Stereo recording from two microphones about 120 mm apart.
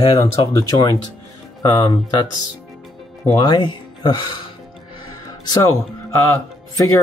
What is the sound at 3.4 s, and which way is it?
Speech, 40° left (ahead or behind).